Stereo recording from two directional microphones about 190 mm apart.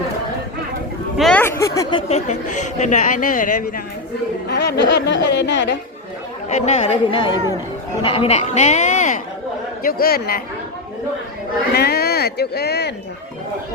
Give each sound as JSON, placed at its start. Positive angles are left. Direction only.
{"t": 1.1, "sound": "speech", "side_deg": 5}
{"t": 4.4, "sound": "a woman's voice", "side_deg": 65}
{"t": 6.5, "sound": "speech", "side_deg": 35}
{"t": 9.8, "sound": "speech", "side_deg": 50}
{"t": 11.7, "sound": "speech", "side_deg": 55}